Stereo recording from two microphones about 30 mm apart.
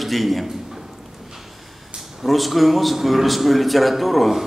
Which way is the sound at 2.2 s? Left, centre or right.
Centre.